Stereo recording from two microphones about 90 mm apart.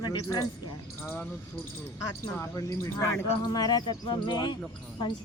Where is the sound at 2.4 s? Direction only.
35° left (ahead or behind).